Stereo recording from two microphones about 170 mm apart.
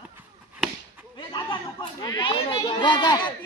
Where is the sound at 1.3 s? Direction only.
25° left (ahead or behind).